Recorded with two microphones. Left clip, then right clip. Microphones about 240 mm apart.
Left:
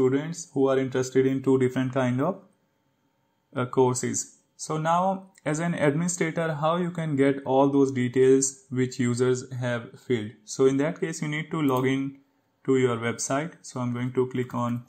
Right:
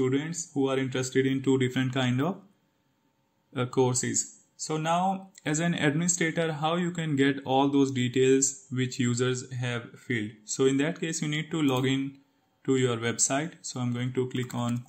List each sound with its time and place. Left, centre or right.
0.0 s speech: centre
0.3 s speech: centre
0.7 s speech: centre
3.5 s speech: centre
4.1 s speech: centre
4.7 s speech: centre
10.6 s speech: centre
11.1 s speech: centre